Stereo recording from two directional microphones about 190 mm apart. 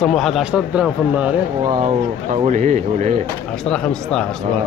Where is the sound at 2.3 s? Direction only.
40° right (ahead or behind).